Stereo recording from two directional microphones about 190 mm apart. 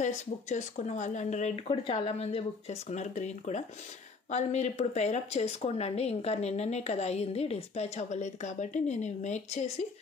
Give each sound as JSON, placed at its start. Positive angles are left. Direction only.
{"t": 0.0, "sound": "speech", "side_deg": 40}